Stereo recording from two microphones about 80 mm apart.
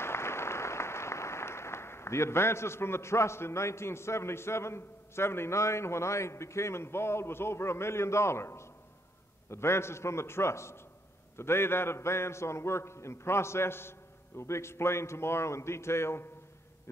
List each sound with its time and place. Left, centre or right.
0.0 s applause: left
9.5 s a man's voice: left